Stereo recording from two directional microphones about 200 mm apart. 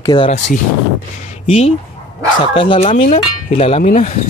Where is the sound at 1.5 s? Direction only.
30° left (ahead or behind).